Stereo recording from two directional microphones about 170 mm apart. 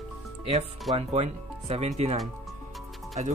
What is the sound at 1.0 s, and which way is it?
Speech, 35° right (ahead or behind).